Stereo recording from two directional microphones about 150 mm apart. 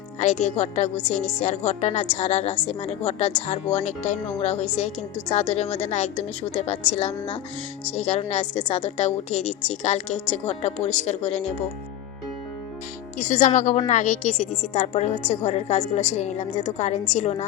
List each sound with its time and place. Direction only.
0.2 s a woman's voice: 50° left (ahead or behind)
13.1 s a woman's voice: 50° left (ahead or behind)